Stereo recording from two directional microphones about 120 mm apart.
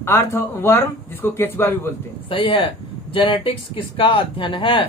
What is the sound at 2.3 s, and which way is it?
Speech, 45° left (ahead or behind).